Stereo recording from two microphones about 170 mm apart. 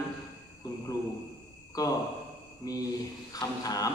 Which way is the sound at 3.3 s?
20° left (ahead or behind).